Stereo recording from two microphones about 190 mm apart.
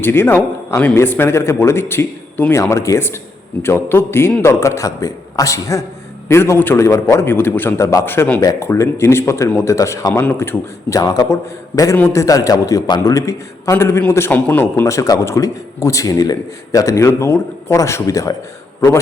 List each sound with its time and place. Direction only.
0.0 s a man's voice: 10° left (ahead or behind)